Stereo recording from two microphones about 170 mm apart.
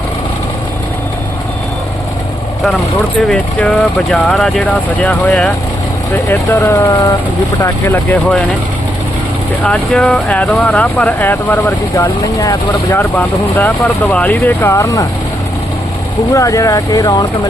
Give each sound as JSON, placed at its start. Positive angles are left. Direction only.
{"t": 3.2, "sound": "speech", "side_deg": 5}
{"t": 9.6, "sound": "speech", "side_deg": 5}
{"t": 16.3, "sound": "speech", "side_deg": 20}